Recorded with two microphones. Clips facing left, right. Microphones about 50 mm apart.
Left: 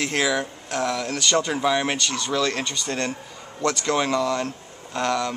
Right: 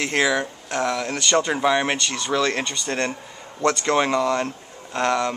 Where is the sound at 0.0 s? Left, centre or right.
Centre.